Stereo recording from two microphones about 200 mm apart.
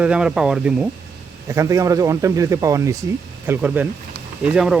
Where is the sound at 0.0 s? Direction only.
5° right (ahead or behind).